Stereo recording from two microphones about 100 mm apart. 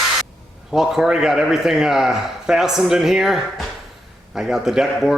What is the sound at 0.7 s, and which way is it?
Speech, 5° right (ahead or behind).